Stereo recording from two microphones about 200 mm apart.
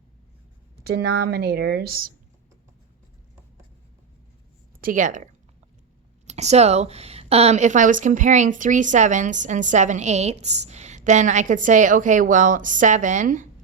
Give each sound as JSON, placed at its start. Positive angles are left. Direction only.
{"t": 0.9, "sound": "speech", "side_deg": -55}
{"t": 4.8, "sound": "speech", "side_deg": -40}